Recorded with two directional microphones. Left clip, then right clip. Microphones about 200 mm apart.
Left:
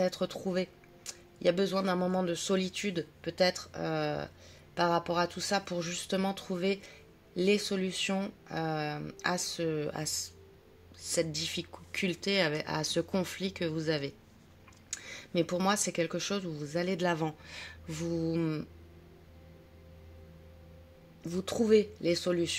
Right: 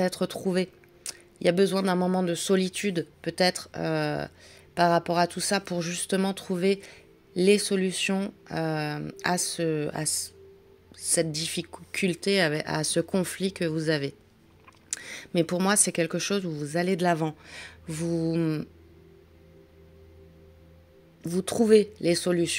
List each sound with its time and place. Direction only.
0.0 s speech: 45° right (ahead or behind)
21.2 s speech: 40° right (ahead or behind)